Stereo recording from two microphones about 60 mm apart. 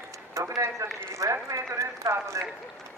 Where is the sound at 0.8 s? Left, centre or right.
Right.